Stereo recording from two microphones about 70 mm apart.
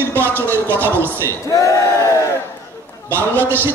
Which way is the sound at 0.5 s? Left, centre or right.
Right.